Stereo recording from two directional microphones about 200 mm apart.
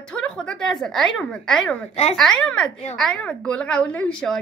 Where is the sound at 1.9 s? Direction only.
35° left (ahead or behind).